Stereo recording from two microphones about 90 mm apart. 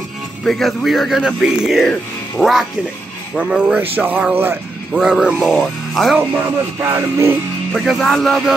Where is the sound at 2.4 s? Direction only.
5° left (ahead or behind).